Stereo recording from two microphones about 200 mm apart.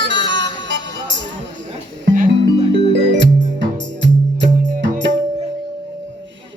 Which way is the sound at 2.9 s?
65° right (ahead or behind).